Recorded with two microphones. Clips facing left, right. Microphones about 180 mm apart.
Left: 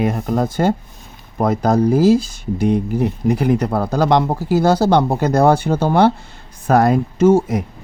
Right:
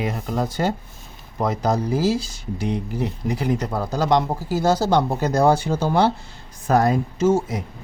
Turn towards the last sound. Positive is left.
turn(degrees=60)  # may be behind; listen again after turning